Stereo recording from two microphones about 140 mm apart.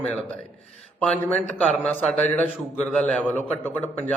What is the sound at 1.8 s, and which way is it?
A man's voice, 10° left (ahead or behind).